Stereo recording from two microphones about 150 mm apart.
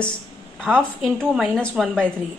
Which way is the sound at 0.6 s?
5° left (ahead or behind).